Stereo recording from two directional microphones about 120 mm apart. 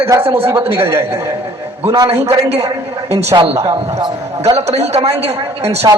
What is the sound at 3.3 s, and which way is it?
Speech, 35° right (ahead or behind).